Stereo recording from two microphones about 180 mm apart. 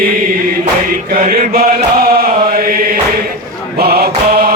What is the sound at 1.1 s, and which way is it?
Chant, 50° right (ahead or behind).